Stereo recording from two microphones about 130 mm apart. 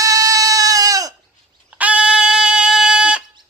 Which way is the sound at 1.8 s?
10° right (ahead or behind).